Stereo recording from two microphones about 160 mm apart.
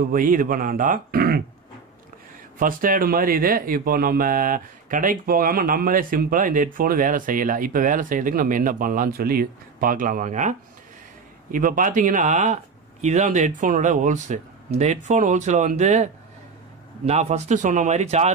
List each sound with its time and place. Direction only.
0.0 s speech: 60° right (ahead or behind)
2.6 s speech: 60° right (ahead or behind)
11.5 s speech: 55° right (ahead or behind)